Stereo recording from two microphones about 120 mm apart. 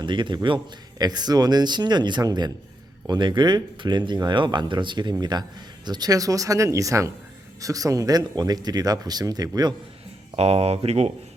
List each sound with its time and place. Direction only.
0.0 s speech: 40° right (ahead or behind)
10.3 s speech: 60° right (ahead or behind)